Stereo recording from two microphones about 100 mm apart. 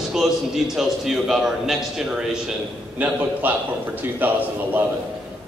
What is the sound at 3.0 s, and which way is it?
A man's voice, 15° right (ahead or behind).